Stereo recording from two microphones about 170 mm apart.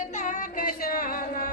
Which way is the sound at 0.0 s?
45° left (ahead or behind).